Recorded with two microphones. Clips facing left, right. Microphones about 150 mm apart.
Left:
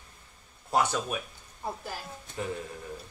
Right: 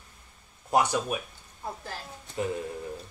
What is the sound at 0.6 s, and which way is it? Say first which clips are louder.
Speech: right 2 dB; 15° right (ahead or behind).